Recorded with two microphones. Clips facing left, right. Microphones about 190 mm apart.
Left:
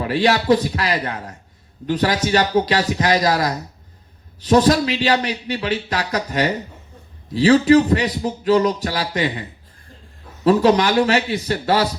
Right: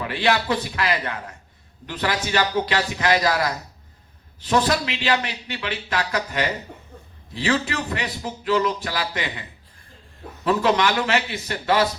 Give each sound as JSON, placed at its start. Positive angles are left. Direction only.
{"t": 0.0, "sound": "speech", "side_deg": 40}
{"t": 10.4, "sound": "speech", "side_deg": 40}